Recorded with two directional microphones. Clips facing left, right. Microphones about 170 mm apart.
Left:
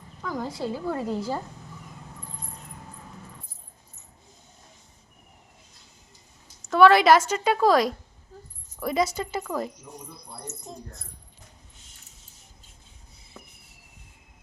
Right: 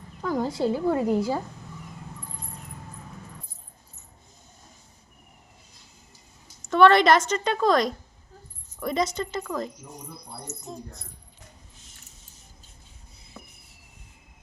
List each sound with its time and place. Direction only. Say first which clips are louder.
0.2 s speech: right 5 dB; 30° right (ahead or behind); by 1.4 s 15° right (ahead or behind)
6.7 s a woman's voice: left 1 dB; 5° left (ahead or behind)
10.5 s speech: right 3 dB; 20° right (ahead or behind)